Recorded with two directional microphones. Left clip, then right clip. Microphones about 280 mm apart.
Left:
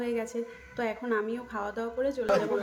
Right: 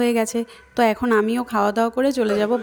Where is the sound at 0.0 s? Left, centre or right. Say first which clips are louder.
Right 11 dB; right.